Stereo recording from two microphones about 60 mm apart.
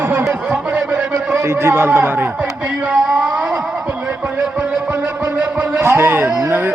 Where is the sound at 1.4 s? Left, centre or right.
Right.